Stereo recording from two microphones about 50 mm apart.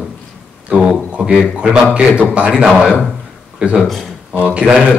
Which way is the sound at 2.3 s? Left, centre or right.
Right.